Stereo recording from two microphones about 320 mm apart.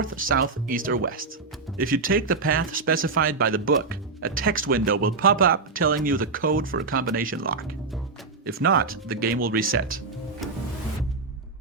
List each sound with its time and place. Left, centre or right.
0.3 s speech: right
10.4 s music: centre